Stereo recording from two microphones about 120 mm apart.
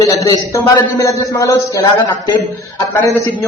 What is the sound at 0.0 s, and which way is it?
Speech, 30° left (ahead or behind).